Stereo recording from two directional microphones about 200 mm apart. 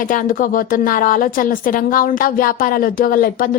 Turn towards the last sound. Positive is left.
turn(degrees=45)  # may be behind; listen again after turning